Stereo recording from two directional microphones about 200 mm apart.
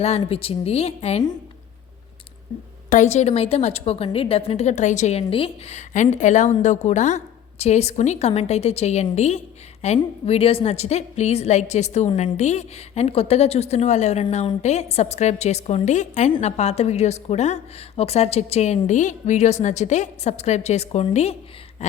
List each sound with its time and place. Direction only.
0.0 s a woman's voice: 30° left (ahead or behind)
2.9 s a woman's voice: 35° left (ahead or behind)
21.8 s a sound: 35° left (ahead or behind)